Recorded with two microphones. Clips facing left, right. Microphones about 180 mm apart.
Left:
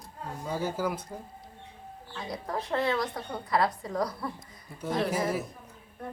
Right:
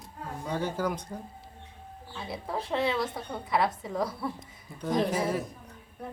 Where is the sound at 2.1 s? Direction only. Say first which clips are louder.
Even; 5° right (ahead or behind).